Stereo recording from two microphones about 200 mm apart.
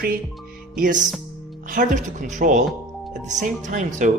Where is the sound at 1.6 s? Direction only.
40° right (ahead or behind).